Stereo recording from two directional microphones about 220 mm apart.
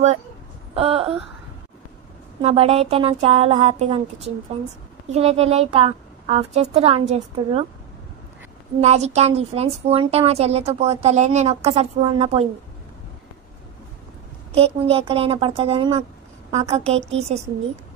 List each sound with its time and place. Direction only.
0.7 s a sound: 25° right (ahead or behind)
2.4 s a woman's voice: 30° right (ahead or behind)
8.8 s a woman's voice: 30° right (ahead or behind)
14.5 s a woman's voice: 25° right (ahead or behind)